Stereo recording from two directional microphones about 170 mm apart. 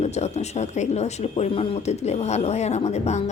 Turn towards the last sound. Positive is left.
turn(degrees=40)  # may be behind; listen again after turning